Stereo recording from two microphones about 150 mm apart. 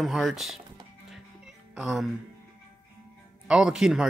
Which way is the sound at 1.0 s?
5° right (ahead or behind).